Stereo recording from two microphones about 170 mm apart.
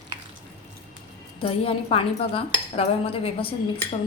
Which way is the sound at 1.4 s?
35° left (ahead or behind).